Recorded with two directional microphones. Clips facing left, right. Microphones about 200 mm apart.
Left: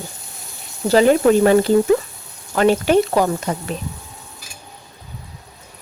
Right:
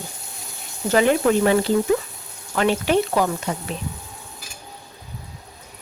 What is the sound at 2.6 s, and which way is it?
Speech, 45° left (ahead or behind).